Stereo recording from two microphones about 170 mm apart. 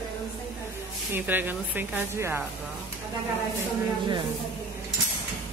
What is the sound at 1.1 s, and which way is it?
Speech, 10° right (ahead or behind).